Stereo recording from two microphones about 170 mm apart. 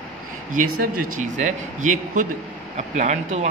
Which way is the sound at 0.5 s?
50° right (ahead or behind).